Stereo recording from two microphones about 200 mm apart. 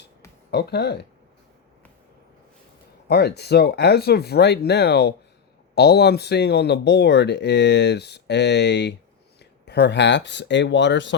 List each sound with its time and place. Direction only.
0.5 s speech: 55° left (ahead or behind)
3.1 s speech: 55° left (ahead or behind)